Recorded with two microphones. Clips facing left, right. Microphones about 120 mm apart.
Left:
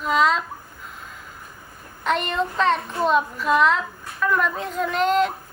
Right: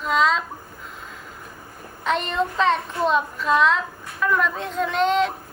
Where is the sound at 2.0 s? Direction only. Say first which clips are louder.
Even; centre (ahead or behind).